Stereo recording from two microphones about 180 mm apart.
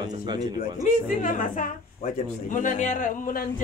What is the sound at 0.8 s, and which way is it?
A man's voice, 45° left (ahead or behind).